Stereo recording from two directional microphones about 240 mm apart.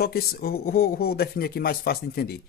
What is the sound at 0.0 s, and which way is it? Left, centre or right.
Speech, left.